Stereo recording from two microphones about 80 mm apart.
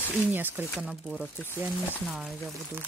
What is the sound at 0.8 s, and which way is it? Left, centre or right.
Speech, centre.